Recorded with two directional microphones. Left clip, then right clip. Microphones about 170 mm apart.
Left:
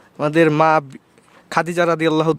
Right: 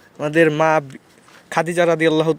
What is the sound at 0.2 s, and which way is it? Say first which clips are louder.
A man's voice: left 1 dB; 25° left (ahead or behind).